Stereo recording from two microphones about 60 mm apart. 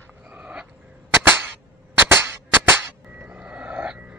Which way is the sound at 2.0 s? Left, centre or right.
Right.